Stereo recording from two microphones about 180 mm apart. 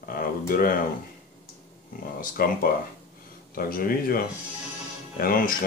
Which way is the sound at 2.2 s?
55° left (ahead or behind).